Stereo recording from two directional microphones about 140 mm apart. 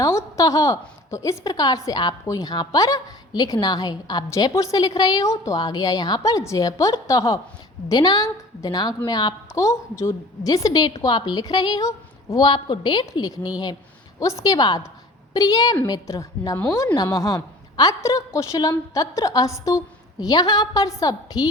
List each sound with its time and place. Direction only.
0.0 s a woman's voice: 20° left (ahead or behind)